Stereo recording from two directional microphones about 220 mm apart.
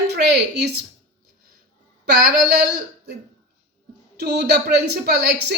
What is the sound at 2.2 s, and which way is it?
Speech, 45° right (ahead or behind).